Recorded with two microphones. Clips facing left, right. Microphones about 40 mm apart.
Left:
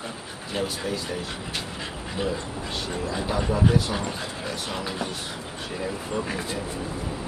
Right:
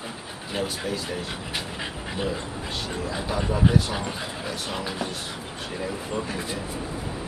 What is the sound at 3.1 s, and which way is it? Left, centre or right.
Speech, centre.